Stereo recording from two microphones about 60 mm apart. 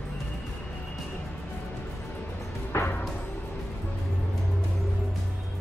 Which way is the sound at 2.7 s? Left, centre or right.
Left.